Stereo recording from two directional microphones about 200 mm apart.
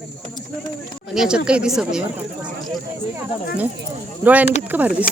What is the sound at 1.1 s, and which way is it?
Speech, 5° right (ahead or behind).